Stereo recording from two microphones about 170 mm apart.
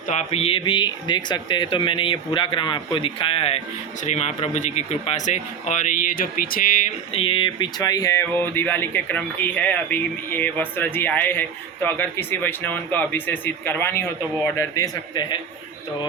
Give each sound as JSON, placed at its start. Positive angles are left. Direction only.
{"t": 0.1, "sound": "speech", "side_deg": 35}
{"t": 7.1, "sound": "speech", "side_deg": 30}